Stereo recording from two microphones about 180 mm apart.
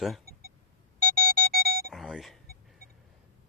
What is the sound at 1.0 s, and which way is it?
Alarm clock, 50° right (ahead or behind).